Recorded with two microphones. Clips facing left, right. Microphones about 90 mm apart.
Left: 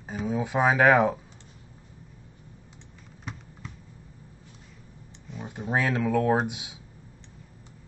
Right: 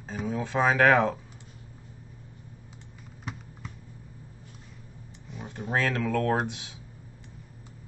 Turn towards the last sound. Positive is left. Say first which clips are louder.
# left 3 dB
turn(degrees=15)  # may be behind; listen again after turning